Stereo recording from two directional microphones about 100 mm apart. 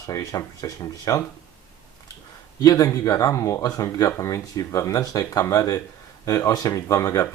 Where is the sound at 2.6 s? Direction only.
35° left (ahead or behind).